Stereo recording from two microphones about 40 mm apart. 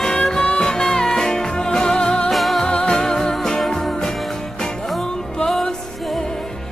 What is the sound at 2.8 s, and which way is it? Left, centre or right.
Music, centre.